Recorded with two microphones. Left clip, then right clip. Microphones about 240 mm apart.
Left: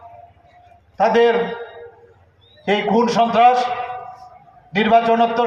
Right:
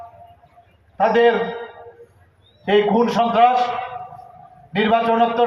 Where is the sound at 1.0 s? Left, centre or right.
Left.